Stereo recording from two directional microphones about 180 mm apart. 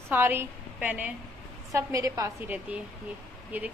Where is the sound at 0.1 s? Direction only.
10° right (ahead or behind).